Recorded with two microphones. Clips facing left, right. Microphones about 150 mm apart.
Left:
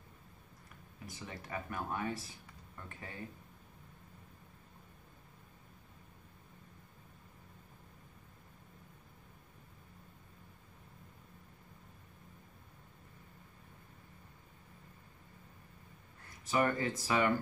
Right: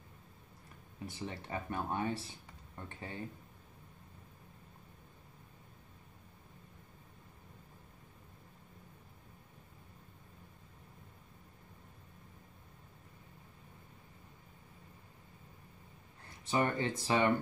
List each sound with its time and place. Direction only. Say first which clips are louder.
1.0 s speech: right 4 dB; 30° right (ahead or behind)
16.4 s speech: even; 25° right (ahead or behind)